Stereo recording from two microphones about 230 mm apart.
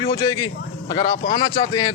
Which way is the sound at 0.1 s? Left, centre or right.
Centre.